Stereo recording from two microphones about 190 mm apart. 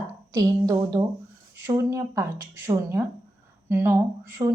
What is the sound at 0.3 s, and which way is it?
A woman's voice, 15° right (ahead or behind).